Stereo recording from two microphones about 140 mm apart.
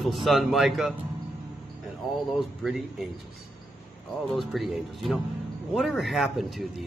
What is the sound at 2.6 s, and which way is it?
Speech, centre (ahead or behind).